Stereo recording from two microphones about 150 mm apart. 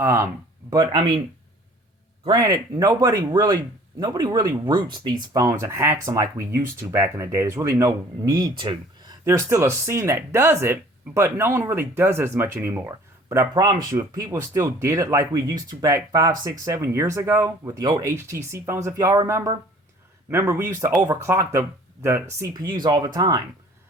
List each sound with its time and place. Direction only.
0.0 s speech: 15° right (ahead or behind)
0.7 s speech: 30° right (ahead or behind)
2.2 s speech: 25° right (ahead or behind)
8.4 s speech: 30° right (ahead or behind)
9.2 s speech: 20° right (ahead or behind)